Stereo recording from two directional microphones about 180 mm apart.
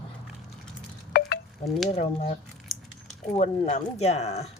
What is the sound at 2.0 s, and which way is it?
Speech, 35° left (ahead or behind).